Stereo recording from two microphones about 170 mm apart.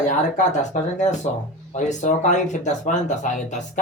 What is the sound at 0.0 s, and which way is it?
Speech, 45° left (ahead or behind).